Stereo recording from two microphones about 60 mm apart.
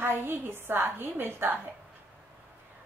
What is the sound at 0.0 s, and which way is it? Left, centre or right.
A woman's voice, right.